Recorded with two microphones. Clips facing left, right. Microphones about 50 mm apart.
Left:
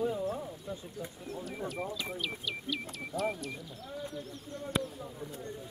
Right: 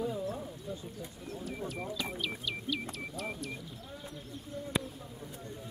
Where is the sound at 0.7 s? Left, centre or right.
Centre.